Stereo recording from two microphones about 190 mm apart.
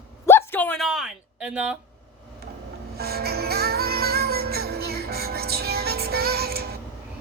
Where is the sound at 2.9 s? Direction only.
55° right (ahead or behind).